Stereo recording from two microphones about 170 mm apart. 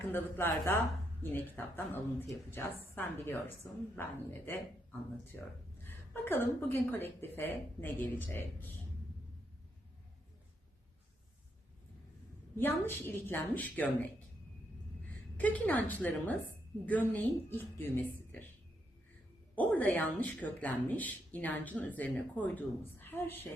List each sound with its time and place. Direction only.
0.1 s speech: 15° left (ahead or behind)
12.5 s speech: 10° left (ahead or behind)
15.4 s speech: 10° left (ahead or behind)
19.5 s speech: 10° left (ahead or behind)